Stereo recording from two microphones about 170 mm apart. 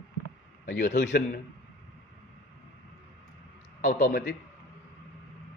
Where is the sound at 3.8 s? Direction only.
55° left (ahead or behind).